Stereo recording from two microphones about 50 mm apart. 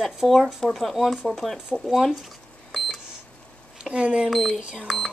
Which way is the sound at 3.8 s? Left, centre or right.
Centre.